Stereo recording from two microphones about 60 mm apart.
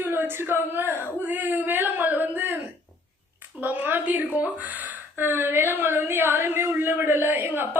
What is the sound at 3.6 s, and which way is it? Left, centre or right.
A woman's voice, right.